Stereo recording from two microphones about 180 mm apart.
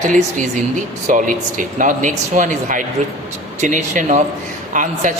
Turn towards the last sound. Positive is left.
turn(degrees=-45)  # may be behind; listen again after turning